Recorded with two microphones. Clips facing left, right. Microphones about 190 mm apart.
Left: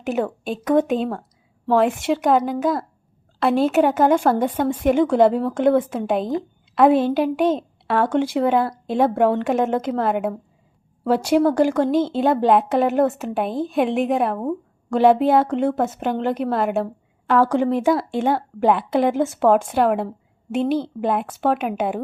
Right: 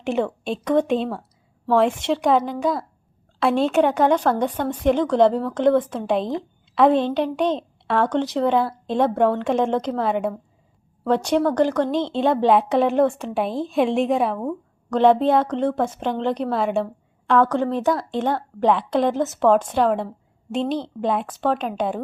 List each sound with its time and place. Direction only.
0.0 s a woman's voice: 5° left (ahead or behind)
14.3 s a woman's voice: 15° left (ahead or behind)